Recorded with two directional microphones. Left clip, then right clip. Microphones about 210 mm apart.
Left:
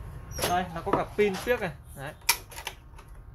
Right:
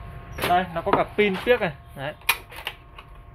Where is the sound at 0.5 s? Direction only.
30° right (ahead or behind).